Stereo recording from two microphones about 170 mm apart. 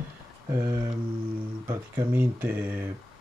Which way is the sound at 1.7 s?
15° right (ahead or behind).